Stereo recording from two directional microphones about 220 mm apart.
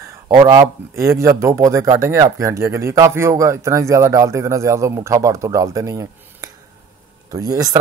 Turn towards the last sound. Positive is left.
turn(degrees=-15)  # may be behind; listen again after turning